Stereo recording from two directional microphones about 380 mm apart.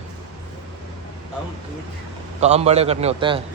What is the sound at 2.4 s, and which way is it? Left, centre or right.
Speech, centre.